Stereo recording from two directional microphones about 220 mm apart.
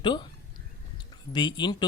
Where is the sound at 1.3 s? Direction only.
20° left (ahead or behind).